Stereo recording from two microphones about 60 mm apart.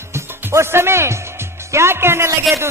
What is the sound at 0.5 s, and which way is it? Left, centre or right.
Music, right.